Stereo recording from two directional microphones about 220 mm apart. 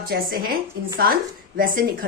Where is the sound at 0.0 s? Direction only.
40° right (ahead or behind).